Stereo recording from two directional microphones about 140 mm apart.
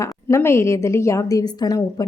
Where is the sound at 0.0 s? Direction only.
20° left (ahead or behind).